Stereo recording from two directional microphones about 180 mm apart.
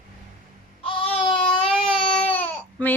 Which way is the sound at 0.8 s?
30° left (ahead or behind).